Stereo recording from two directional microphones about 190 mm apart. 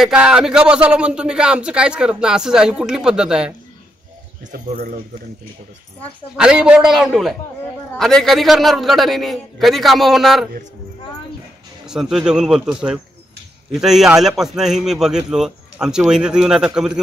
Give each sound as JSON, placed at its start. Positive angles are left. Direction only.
{"t": 0.0, "sound": "a man's voice", "side_deg": -5}
{"t": 4.5, "sound": "speech", "side_deg": -45}
{"t": 6.3, "sound": "a man's voice", "side_deg": -5}
{"t": 11.8, "sound": "a man's voice", "side_deg": -5}